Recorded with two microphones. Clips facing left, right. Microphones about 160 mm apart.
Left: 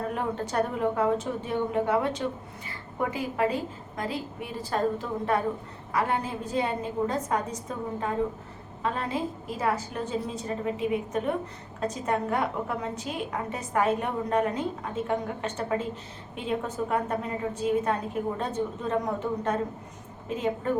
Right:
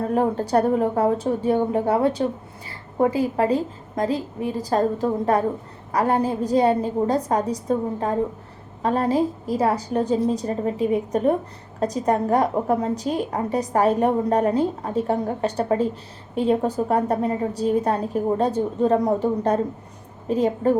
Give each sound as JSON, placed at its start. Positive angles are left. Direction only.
{"t": 0.1, "sound": "a woman's voice", "side_deg": -35}